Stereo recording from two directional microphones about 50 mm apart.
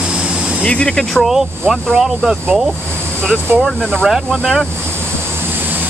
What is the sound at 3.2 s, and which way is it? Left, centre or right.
Speech, centre.